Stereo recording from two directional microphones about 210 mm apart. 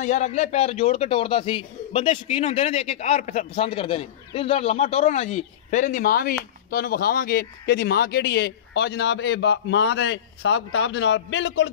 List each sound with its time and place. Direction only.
0.0 s a man's voice: 35° left (ahead or behind); by 11.7 s 60° left (ahead or behind)